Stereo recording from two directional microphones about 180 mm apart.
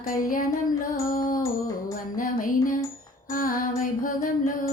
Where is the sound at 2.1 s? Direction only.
50° left (ahead or behind).